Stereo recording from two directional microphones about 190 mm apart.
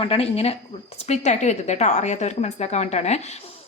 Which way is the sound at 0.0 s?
30° left (ahead or behind).